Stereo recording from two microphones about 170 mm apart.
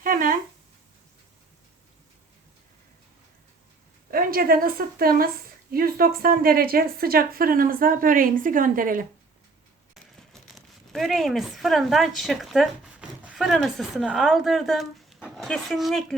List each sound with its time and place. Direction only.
0.0 s a sound: 55° right (ahead or behind)
4.1 s a woman's voice: 60° right (ahead or behind)
9.9 s speech: centre (ahead or behind)